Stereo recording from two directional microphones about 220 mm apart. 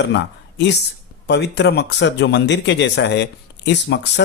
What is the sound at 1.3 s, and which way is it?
Speech, 50° left (ahead or behind).